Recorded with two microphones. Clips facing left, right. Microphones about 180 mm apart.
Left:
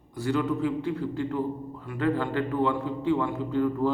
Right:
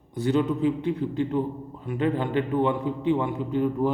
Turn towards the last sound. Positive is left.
turn(degrees=-20)  # may be behind; listen again after turning